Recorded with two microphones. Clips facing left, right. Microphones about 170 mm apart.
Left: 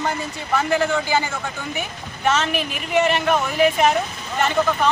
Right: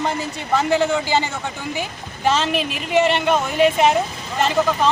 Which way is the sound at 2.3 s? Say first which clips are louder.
Right 2 dB; 30° right (ahead or behind).